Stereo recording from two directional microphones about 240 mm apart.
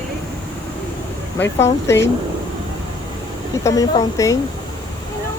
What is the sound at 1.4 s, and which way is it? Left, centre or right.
Speech, centre.